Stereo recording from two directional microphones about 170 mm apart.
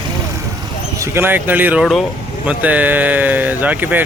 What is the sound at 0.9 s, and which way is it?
Speech, 15° right (ahead or behind).